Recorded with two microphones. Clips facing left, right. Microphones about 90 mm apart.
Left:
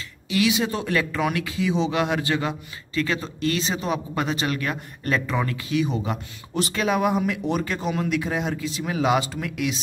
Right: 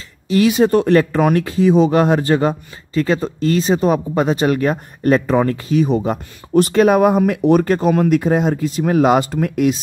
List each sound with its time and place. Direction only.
0.3 s speech: 45° right (ahead or behind)